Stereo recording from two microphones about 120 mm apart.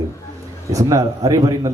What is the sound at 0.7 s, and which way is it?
A man's voice, 30° right (ahead or behind).